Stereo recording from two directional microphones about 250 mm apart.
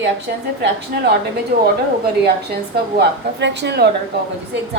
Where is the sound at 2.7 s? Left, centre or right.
Right.